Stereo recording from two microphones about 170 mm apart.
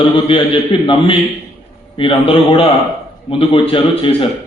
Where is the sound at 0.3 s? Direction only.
30° left (ahead or behind).